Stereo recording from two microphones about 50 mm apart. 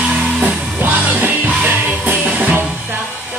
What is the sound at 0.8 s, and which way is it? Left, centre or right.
Music, right.